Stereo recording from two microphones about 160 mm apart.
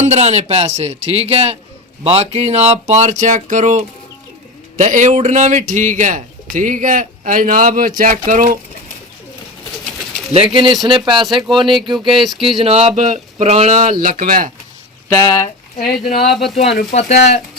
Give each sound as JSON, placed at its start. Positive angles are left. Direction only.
{"t": 0.1, "sound": "a man's voice", "side_deg": -45}
{"t": 10.3, "sound": "speech", "side_deg": -30}
{"t": 11.2, "sound": "speech", "side_deg": 0}
{"t": 11.5, "sound": "speech", "side_deg": -30}
{"t": 12.2, "sound": "speech", "side_deg": 0}
{"t": 12.6, "sound": "a man's voice", "side_deg": -40}
{"t": 14.0, "sound": "speech", "side_deg": -55}
{"t": 15.1, "sound": "speech", "side_deg": 20}
{"t": 15.8, "sound": "speech", "side_deg": 0}
{"t": 16.9, "sound": "speech", "side_deg": 45}